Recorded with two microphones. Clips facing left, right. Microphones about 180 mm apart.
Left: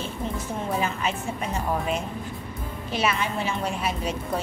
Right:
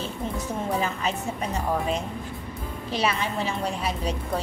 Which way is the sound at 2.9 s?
35° right (ahead or behind).